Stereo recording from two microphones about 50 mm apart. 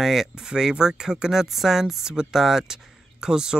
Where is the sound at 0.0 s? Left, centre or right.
Centre.